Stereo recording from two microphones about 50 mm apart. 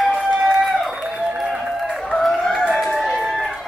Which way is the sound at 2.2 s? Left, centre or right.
Centre.